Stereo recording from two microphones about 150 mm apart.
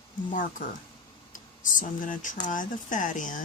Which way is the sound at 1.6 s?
60° left (ahead or behind).